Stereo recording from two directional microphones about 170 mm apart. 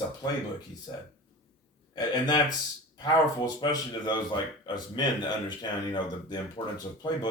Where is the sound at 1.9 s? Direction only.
25° left (ahead or behind).